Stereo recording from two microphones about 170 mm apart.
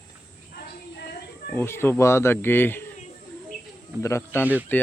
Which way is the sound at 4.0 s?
15° left (ahead or behind).